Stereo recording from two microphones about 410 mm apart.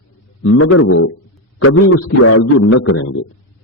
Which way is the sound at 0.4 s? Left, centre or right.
Left.